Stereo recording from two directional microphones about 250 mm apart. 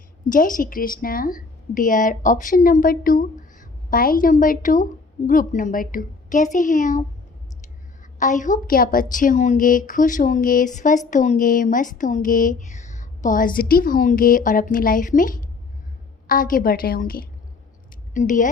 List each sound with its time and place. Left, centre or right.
0.3 s a woman's voice: left
8.2 s a woman's voice: left